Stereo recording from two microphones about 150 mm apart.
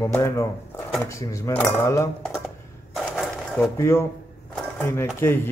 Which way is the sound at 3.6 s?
15° left (ahead or behind).